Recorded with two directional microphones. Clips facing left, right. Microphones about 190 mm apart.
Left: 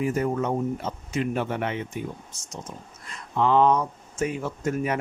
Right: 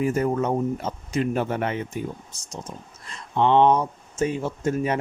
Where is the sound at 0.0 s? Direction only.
40° right (ahead or behind).